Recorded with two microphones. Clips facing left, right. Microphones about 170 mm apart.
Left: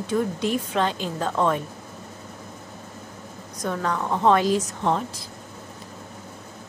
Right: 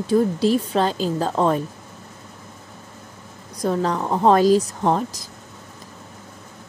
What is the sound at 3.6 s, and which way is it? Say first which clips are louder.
A woman's voice: right 5 dB; 35° right (ahead or behind).